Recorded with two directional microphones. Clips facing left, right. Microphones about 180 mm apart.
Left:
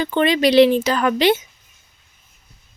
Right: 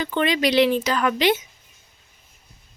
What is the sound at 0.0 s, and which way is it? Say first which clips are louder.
Speech: left 5 dB; 30° left (ahead or behind).